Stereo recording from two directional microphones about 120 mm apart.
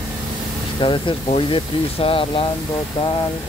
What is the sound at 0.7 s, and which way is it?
Speech, 45° left (ahead or behind).